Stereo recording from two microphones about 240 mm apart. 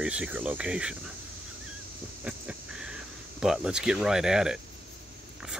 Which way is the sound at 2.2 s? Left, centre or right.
Centre.